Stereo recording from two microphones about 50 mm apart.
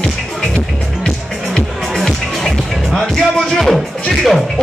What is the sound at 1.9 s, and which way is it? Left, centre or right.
Music, centre.